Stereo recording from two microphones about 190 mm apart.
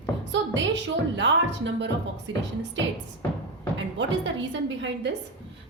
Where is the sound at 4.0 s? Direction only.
70° right (ahead or behind).